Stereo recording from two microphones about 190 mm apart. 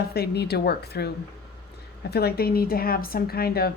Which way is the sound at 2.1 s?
55° left (ahead or behind).